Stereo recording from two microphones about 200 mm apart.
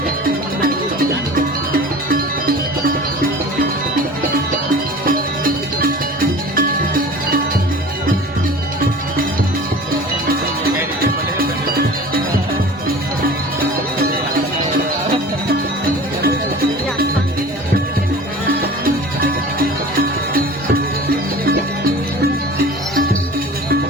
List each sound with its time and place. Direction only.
5.8 s music: 45° right (ahead or behind)
11.0 s music: 50° right (ahead or behind)